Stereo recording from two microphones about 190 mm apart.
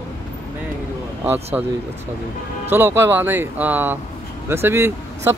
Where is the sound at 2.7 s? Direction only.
10° right (ahead or behind).